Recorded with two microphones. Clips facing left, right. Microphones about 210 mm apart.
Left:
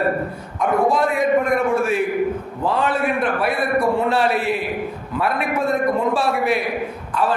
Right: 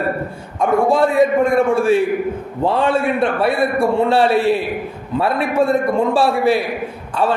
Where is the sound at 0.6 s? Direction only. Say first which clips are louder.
Right 4 dB; 30° right (ahead or behind).